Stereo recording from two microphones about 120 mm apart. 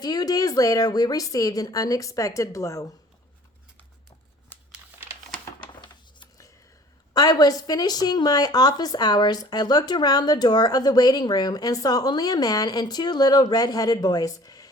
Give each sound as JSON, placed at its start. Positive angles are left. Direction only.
{"t": 0.0, "sound": "a woman's voice", "side_deg": 35}
{"t": 5.0, "sound": "typing", "side_deg": -20}
{"t": 7.1, "sound": "a woman's voice", "side_deg": 35}